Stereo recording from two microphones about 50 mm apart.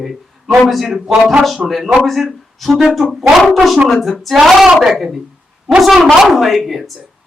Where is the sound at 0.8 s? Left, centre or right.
Centre.